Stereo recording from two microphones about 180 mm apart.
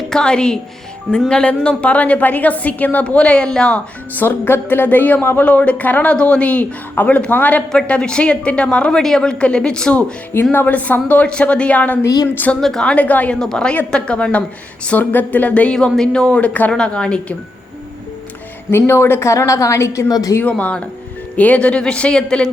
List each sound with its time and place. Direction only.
0.1 s a woman's voice: 5° left (ahead or behind)
12.0 s a woman's voice: 20° left (ahead or behind)
12.4 s a woman's voice: 5° left (ahead or behind)
18.7 s a woman's voice: 15° left (ahead or behind)
20.4 s a woman's voice: 10° left (ahead or behind)